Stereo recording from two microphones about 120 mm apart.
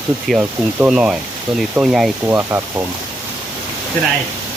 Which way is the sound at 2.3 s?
20° right (ahead or behind).